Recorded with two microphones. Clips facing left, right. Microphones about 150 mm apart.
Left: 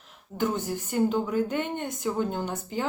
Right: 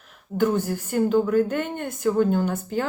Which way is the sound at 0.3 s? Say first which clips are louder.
Right 6 dB; 20° left (ahead or behind).